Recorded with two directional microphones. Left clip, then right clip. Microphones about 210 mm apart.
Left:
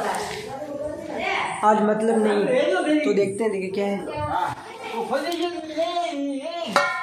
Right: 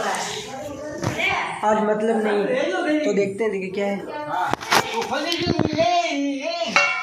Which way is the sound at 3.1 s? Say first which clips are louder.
Even; 5° left (ahead or behind).